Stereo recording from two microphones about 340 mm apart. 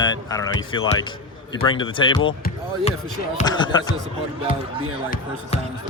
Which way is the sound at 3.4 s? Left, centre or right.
Centre.